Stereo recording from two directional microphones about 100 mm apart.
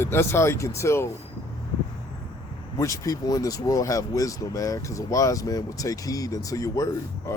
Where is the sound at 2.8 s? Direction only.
35° left (ahead or behind).